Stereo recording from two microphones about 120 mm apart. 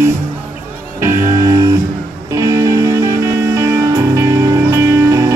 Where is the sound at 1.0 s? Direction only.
25° right (ahead or behind).